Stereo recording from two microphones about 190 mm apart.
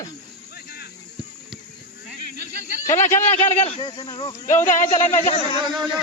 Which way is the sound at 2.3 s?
45° left (ahead or behind).